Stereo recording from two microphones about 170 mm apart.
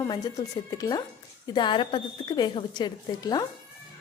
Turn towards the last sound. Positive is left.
turn(degrees=25)  # may be behind; listen again after turning